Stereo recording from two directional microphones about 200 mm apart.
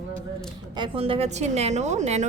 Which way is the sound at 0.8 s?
25° right (ahead or behind).